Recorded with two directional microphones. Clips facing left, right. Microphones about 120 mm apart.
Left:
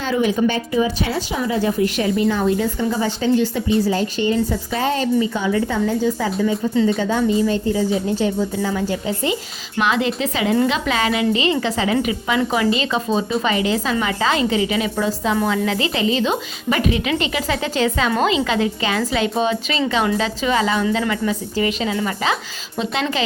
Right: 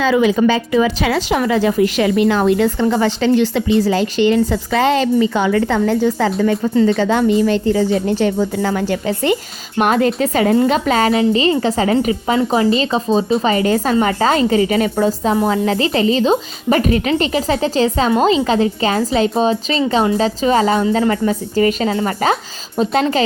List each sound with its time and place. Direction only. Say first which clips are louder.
0.1 s a woman's voice: right 2 dB; 90° right; by 6.7 s 65° right (ahead or behind)
6.8 s a woman's voice: right 5 dB; 75° right (ahead or behind)
9.7 s speech: right 5 dB; 45° right (ahead or behind)